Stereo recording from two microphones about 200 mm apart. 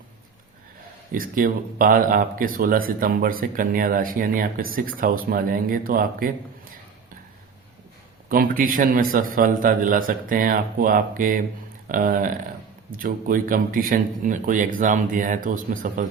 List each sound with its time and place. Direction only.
1.1 s speech: 45° right (ahead or behind)
8.3 s speech: 45° right (ahead or behind)